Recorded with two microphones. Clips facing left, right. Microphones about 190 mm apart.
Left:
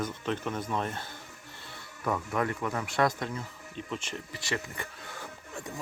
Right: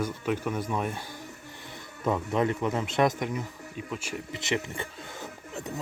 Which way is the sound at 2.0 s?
20° right (ahead or behind).